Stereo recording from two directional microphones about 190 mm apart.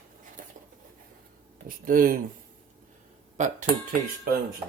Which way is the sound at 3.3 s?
40° right (ahead or behind).